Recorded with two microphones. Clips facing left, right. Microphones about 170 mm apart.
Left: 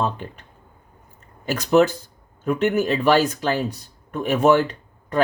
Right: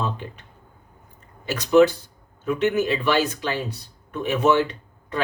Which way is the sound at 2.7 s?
45° left (ahead or behind).